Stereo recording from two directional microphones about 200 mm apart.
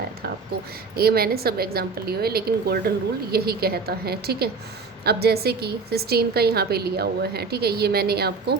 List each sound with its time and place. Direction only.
0.9 s a woman's voice: 50° right (ahead or behind)